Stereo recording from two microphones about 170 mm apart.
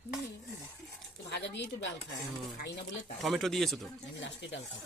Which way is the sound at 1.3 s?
90° left.